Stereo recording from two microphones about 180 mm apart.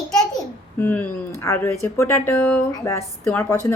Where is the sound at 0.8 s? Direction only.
10° left (ahead or behind).